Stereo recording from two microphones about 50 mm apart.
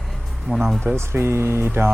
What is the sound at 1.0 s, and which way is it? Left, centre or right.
Speech, right.